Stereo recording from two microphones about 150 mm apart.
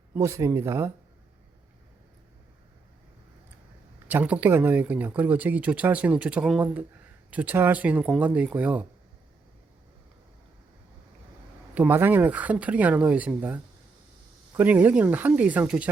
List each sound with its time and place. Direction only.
0.1 s speech: 20° right (ahead or behind)
4.1 s speech: 10° right (ahead or behind)
11.7 s speech: 10° right (ahead or behind)